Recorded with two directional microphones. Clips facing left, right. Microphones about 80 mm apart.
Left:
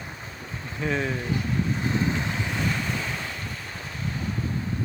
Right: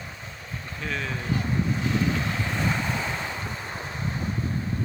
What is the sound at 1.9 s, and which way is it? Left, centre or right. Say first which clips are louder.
Boat: even; left.